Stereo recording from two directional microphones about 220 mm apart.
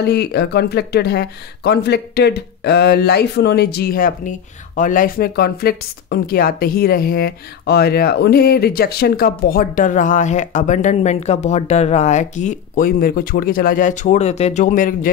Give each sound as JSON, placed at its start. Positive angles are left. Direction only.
{"t": 0.0, "sound": "speech", "side_deg": 50}